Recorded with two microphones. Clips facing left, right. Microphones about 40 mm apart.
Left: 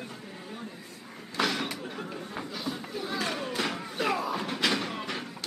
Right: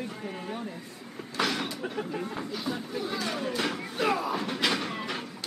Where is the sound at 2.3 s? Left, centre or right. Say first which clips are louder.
Right 2 dB; centre.